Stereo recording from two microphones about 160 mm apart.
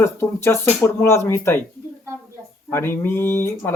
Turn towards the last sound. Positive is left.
turn(degrees=15)  # may be behind; listen again after turning